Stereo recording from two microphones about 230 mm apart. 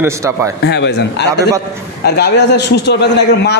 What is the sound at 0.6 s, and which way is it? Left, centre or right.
A man's voice, left.